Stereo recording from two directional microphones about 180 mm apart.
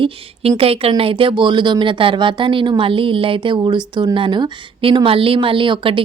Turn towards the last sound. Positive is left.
turn(degrees=-30)  # may be behind; listen again after turning